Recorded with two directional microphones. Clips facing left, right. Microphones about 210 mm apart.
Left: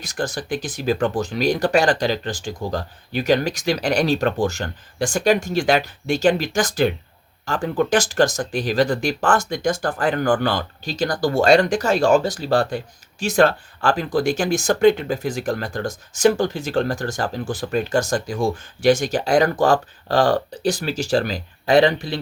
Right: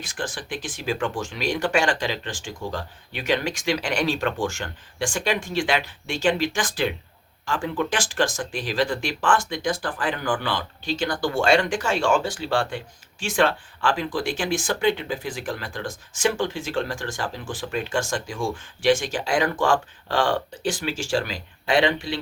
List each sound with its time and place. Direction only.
0.0 s speech: 40° left (ahead or behind)